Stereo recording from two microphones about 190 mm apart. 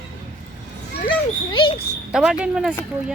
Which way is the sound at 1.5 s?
25° left (ahead or behind).